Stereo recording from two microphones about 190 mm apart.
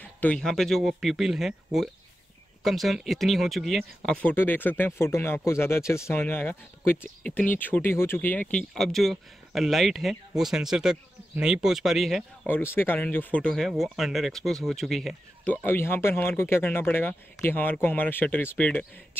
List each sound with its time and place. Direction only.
0.0 s speech: 5° left (ahead or behind)
12.4 s speech: 10° left (ahead or behind)